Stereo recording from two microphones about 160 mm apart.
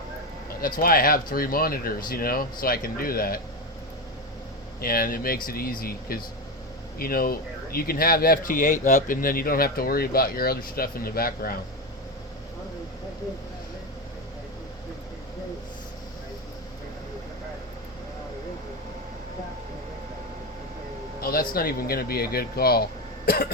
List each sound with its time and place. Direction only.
0.6 s speech: 65° left (ahead or behind)
4.8 s speech: 65° left (ahead or behind)
21.2 s a sound: 65° left (ahead or behind)
21.5 s speech: 70° left (ahead or behind)